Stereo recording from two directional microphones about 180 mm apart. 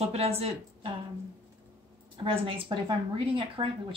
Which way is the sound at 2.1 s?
30° right (ahead or behind).